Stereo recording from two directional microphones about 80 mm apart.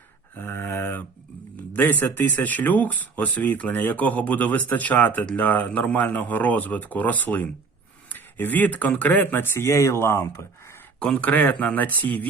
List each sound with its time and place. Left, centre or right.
0.3 s a sound: left
1.7 s speech: left
11.0 s speech: centre